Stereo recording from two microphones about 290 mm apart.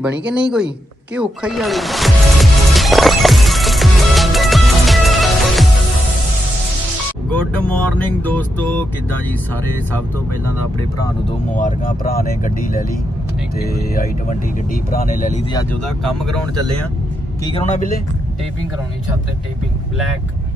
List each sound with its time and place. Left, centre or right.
0.2 s speech: centre
1.1 s music: centre
7.2 s speech: centre
11.0 s speech: left
14.7 s speech: left
15.5 s speech: centre
17.5 s speech: left